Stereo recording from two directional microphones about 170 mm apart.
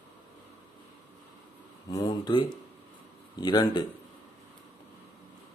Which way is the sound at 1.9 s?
20° left (ahead or behind).